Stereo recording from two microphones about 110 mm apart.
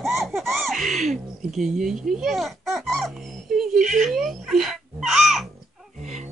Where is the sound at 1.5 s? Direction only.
5° right (ahead or behind).